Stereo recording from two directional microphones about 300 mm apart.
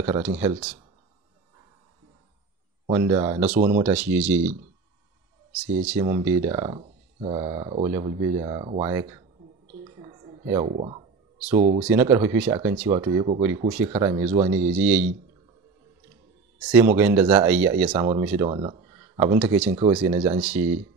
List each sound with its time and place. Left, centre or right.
0.0 s speech: centre
2.9 s speech: centre
3.5 s speech: right
3.8 s speech: centre
5.9 s speech: centre
10.0 s a sound: centre
11.5 s speech: centre
11.9 s speech: centre
14.8 s speech: centre
16.6 s speech: centre